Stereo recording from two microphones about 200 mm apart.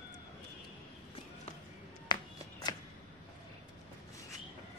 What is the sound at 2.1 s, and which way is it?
Music, 20° left (ahead or behind).